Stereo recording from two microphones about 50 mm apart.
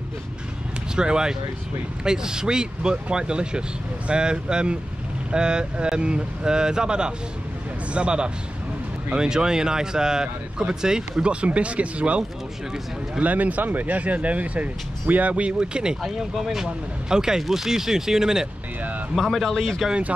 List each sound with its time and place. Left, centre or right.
0.9 s speech: centre
19.1 s a man's voice: centre